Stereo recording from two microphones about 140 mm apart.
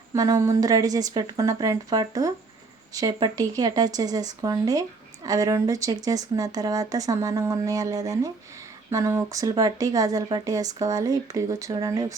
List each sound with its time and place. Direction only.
0.1 s speech: 25° right (ahead or behind)